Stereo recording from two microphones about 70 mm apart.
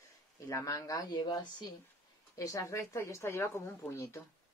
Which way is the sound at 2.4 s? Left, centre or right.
Left.